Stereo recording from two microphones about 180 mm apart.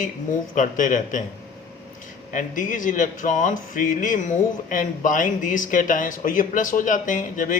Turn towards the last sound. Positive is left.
turn(degrees=45)  # may be behind; listen again after turning